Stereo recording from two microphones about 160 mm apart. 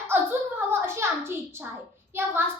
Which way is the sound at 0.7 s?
15° right (ahead or behind).